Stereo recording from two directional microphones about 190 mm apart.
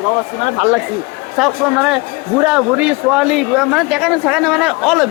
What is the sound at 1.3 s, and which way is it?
Speech, centre (ahead or behind).